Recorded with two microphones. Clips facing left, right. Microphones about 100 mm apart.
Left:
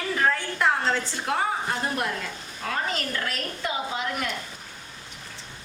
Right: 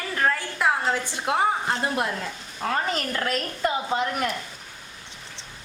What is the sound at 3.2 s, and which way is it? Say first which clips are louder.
A woman's voice: right 5 dB; 40° right (ahead or behind).